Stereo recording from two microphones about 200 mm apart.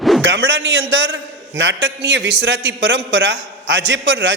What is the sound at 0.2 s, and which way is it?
A man's voice, 65° right (ahead or behind).